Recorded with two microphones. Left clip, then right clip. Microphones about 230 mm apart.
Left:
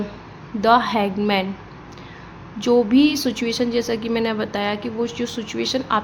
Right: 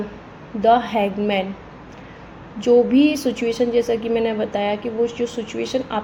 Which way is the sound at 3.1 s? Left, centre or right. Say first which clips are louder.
Right 1 dB; centre.